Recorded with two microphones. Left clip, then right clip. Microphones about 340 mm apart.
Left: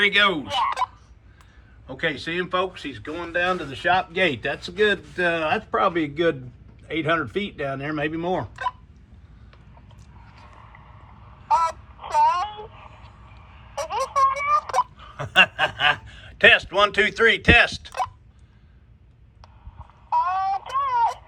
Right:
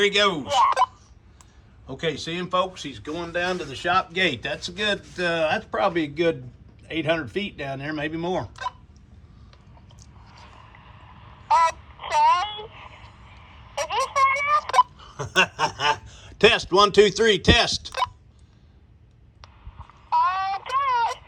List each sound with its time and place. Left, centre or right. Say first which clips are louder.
0.0 s speech: left 2 dB; centre
0.5 s fowl: right 4 dB; right
1.9 s speech: left 2 dB; centre
10.4 s crow: even; centre
20.1 s a sound: even; centre